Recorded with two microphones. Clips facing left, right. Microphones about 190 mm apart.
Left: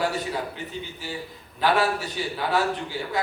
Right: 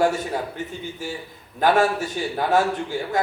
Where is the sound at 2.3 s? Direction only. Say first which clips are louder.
Right 5 dB; 45° right (ahead or behind).